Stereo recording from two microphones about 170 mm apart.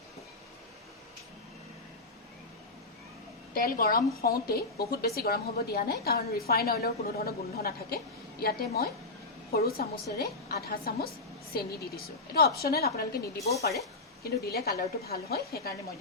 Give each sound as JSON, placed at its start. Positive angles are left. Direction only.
{"t": 3.5, "sound": "a woman's voice", "side_deg": 60}